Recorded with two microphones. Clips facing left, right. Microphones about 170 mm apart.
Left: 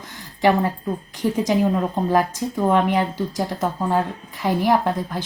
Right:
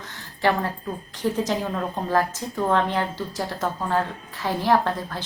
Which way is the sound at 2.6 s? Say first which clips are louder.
Left 4 dB; 15° left (ahead or behind).